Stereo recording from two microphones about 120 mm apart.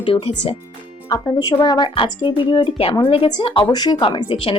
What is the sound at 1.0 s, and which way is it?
Speech, 30° left (ahead or behind).